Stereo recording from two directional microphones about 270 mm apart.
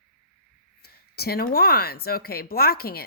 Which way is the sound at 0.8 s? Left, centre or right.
Left.